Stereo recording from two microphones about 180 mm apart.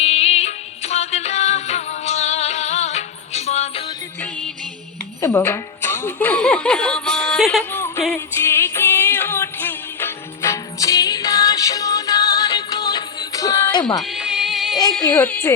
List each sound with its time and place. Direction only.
0.0 s music: 35° left (ahead or behind)
4.2 s music: 5° left (ahead or behind)
5.2 s speech: 15° left (ahead or behind)
7.7 s music: 15° left (ahead or behind)
14.0 s music: 5° right (ahead or behind)
14.8 s speech: 5° left (ahead or behind)